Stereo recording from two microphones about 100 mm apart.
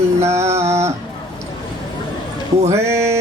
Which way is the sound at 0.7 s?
30° right (ahead or behind).